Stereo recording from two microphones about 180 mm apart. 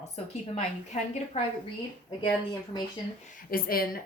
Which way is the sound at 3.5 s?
55° left (ahead or behind).